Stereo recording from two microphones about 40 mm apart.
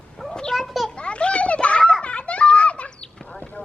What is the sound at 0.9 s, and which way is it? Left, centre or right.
Children playing, left.